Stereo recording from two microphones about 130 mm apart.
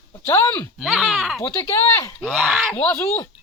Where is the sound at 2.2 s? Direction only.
5° right (ahead or behind).